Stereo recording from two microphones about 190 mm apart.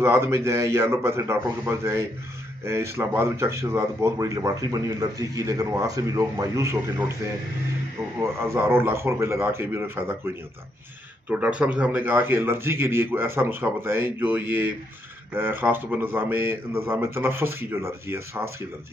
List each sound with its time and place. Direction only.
0.0 s a man's voice: 15° right (ahead or behind)
8.2 s a man's voice: 15° right (ahead or behind)